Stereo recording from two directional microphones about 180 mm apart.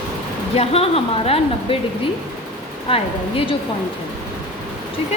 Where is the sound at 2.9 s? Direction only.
30° left (ahead or behind).